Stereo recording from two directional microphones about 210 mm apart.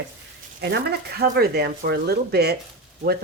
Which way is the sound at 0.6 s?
50° right (ahead or behind).